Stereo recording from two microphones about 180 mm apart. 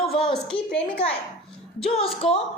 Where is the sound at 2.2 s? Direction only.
35° left (ahead or behind).